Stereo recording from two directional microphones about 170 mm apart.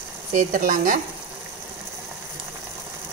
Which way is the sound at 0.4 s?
50° right (ahead or behind).